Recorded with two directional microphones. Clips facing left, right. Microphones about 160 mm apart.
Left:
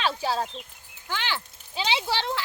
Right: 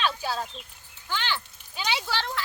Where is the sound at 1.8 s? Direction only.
25° left (ahead or behind).